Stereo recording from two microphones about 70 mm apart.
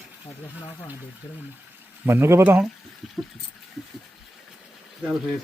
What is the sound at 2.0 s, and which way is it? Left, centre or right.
Speech, right.